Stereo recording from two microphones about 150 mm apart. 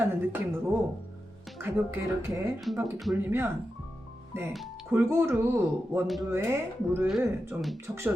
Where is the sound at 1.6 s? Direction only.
15° right (ahead or behind).